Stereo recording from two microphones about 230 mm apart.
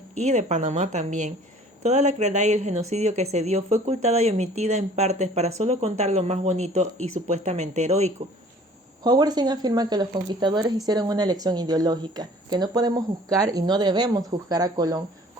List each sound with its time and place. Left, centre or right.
0.2 s a woman's voice: right
9.0 s a woman's voice: centre